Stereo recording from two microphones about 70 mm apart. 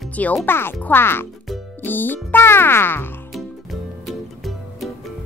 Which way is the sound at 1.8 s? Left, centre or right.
Left.